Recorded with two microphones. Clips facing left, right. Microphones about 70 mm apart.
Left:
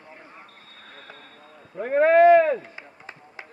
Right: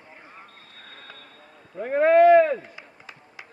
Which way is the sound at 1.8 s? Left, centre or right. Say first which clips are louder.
Even; centre.